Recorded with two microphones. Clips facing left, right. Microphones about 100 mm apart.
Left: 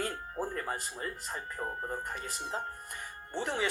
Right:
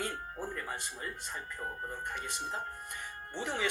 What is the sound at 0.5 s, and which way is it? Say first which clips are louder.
Speech: left 3 dB; 40° left (ahead or behind).